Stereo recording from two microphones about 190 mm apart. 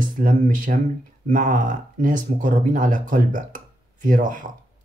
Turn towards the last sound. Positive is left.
turn(degrees=-45)  # may be behind; listen again after turning